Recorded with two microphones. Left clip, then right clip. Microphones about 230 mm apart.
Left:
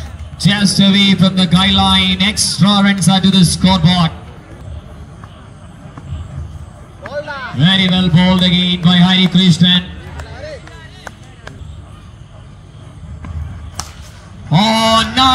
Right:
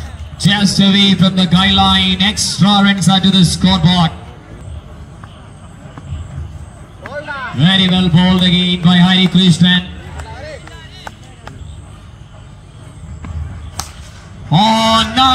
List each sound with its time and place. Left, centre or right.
0.4 s speech: centre
7.1 s a sound: left
7.5 s mantra: centre
13.8 s basketball bounce: centre
14.5 s mantra: centre